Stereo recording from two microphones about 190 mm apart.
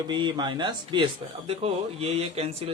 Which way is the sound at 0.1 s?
25° right (ahead or behind).